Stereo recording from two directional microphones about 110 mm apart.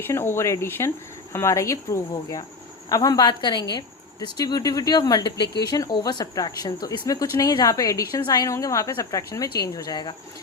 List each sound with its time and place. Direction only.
0.0 s a woman's voice: 20° left (ahead or behind); by 10.2 s 40° left (ahead or behind)